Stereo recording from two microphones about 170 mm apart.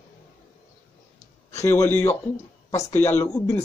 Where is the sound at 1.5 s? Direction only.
15° left (ahead or behind).